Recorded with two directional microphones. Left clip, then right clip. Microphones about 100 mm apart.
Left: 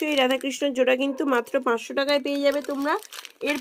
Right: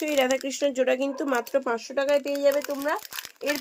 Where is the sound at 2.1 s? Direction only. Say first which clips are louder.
Right 1 dB; 65° left (ahead or behind).